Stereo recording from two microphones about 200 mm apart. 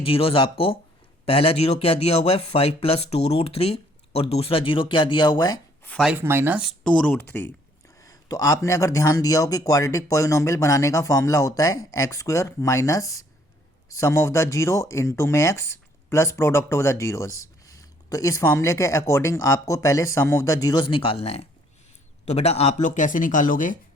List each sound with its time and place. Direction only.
0.0 s speech: 30° left (ahead or behind)
5.8 s a man's voice: 5° left (ahead or behind); by 23.7 s 40° left (ahead or behind)